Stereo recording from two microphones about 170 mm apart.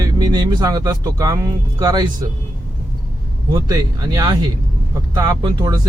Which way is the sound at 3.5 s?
25° right (ahead or behind).